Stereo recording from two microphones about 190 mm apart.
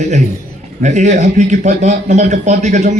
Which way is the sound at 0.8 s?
40° right (ahead or behind).